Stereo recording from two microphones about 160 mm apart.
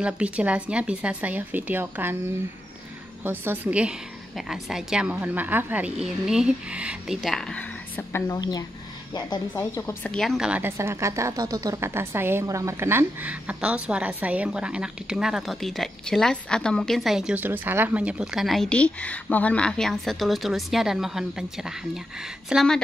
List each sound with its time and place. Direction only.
0.0 s speech: 10° right (ahead or behind)
3.3 s a woman's voice: 10° right (ahead or behind); by 8.2 s 10° left (ahead or behind)
8.3 s a woman's voice: 25° left (ahead or behind)
10.1 s a woman's voice: centre (ahead or behind)